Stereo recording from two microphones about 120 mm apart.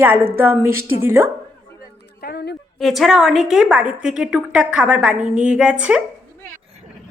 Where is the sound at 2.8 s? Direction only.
Centre (ahead or behind).